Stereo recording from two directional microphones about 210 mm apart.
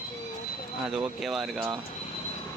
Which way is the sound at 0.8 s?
5° right (ahead or behind).